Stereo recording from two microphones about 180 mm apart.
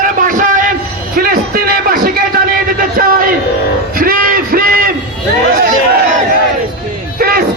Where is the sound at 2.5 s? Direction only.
50° right (ahead or behind).